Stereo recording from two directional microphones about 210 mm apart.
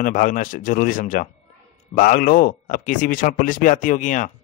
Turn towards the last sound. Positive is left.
turn(degrees=35)  # may be behind; listen again after turning